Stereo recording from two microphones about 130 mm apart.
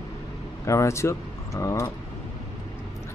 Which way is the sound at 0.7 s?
20° left (ahead or behind).